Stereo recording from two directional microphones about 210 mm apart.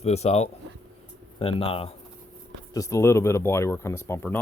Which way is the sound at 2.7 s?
15° left (ahead or behind).